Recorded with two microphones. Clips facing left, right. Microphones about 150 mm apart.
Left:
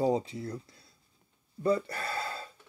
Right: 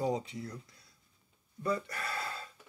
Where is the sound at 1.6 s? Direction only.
30° left (ahead or behind).